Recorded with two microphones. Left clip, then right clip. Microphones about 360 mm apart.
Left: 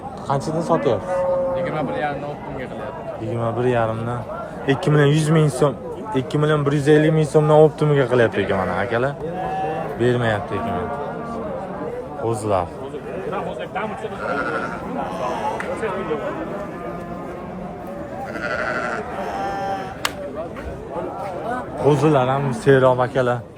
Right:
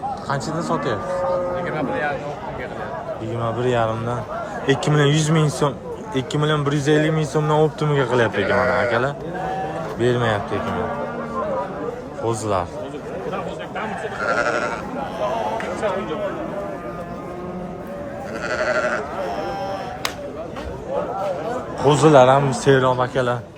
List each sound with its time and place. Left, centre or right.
1.6 s speech: left
3.4 s speech: centre
12.2 s speech: centre
14.2 s sheep: right
18.4 s sheep: centre
19.4 s sheep: left
21.8 s speech: centre